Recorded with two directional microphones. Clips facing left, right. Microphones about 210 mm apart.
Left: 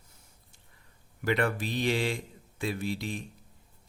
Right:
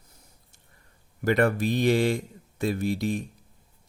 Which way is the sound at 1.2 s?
45° right (ahead or behind).